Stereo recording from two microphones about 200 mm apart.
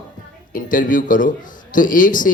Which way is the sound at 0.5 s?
40° left (ahead or behind).